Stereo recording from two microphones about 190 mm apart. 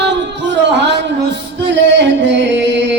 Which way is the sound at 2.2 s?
70° right (ahead or behind).